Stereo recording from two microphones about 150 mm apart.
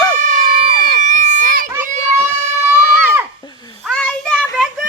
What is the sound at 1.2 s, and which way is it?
Children playing, 60° right (ahead or behind).